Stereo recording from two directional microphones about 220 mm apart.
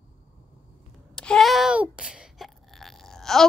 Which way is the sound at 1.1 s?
5° left (ahead or behind).